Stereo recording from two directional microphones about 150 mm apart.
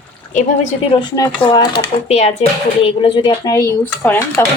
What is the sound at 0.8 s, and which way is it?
A woman's voice, 30° left (ahead or behind).